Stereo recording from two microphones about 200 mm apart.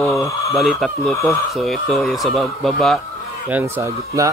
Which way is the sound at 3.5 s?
10° right (ahead or behind).